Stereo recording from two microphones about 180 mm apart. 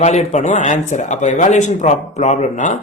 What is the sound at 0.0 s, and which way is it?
Speech, 40° left (ahead or behind).